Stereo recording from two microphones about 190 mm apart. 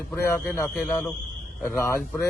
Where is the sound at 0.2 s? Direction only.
15° left (ahead or behind).